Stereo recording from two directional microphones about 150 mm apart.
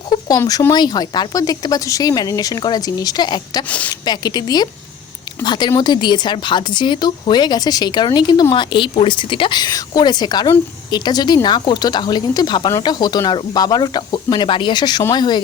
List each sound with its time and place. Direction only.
0.1 s speech: 25° left (ahead or behind)
3.7 s speech: 10° left (ahead or behind)
4.0 s speech: 25° left (ahead or behind)